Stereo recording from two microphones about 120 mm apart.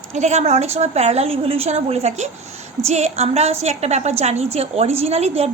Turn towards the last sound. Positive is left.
turn(degrees=-60)  # may be behind; listen again after turning